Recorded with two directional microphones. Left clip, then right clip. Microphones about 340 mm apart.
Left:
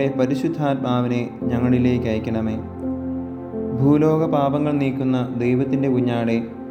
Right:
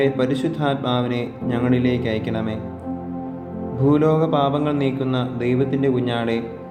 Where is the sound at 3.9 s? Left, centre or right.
Centre.